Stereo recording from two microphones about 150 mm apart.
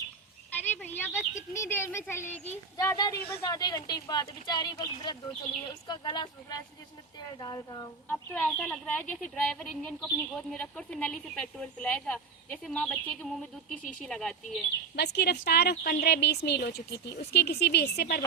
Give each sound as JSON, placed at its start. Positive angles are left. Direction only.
{"t": 0.5, "sound": "a sound", "side_deg": 15}
{"t": 1.5, "sound": "speech", "side_deg": 15}
{"t": 2.7, "sound": "a woman's voice", "side_deg": 25}
{"t": 8.0, "sound": "speech", "side_deg": 10}
{"t": 14.9, "sound": "speech", "side_deg": 90}